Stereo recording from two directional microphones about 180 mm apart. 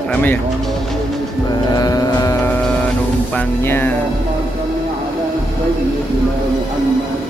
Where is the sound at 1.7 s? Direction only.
20° left (ahead or behind).